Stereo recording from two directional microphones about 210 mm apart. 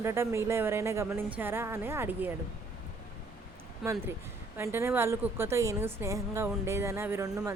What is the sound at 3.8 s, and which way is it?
Speech, 15° right (ahead or behind).